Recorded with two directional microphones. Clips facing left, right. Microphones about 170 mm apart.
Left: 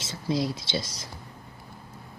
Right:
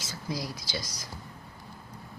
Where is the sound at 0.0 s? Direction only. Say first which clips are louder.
Left 8 dB; 25° left (ahead or behind).